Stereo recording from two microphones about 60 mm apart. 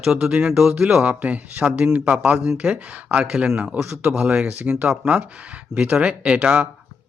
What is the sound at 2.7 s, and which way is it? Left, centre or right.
Speech, right.